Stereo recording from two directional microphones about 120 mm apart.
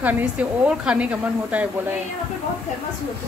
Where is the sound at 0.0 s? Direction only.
10° right (ahead or behind).